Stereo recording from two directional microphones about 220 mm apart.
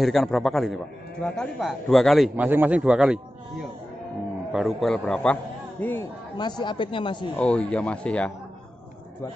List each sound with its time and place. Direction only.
0.0 s a man's voice: centre (ahead or behind)
6.6 s speech: 20° left (ahead or behind)
7.3 s a man's voice: 5° left (ahead or behind)